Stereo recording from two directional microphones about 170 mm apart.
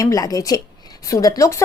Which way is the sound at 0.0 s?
20° left (ahead or behind).